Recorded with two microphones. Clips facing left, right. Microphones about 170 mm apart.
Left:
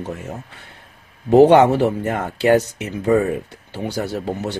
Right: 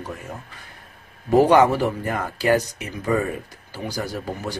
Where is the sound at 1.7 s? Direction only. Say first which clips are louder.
Left 4 dB; 65° left (ahead or behind).